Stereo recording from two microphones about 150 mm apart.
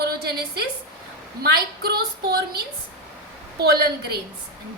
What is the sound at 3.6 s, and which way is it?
Speech, 90° right.